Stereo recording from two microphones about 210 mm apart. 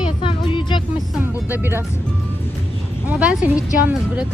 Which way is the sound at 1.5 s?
10° right (ahead or behind).